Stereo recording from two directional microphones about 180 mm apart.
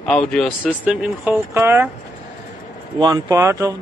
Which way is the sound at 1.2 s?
10° right (ahead or behind).